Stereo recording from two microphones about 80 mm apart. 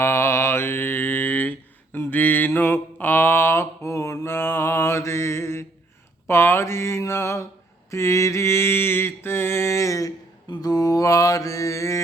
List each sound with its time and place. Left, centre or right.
0.0 s mantra: left
6.2 s speech: left
7.9 s mantra: left
10.5 s mantra: left